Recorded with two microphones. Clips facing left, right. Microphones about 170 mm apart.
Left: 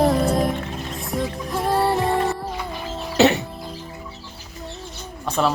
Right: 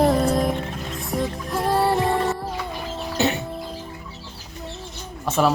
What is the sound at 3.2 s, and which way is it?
Music, 90° left.